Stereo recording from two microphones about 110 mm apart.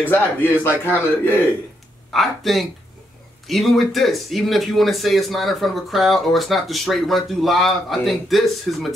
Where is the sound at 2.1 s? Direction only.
Centre (ahead or behind).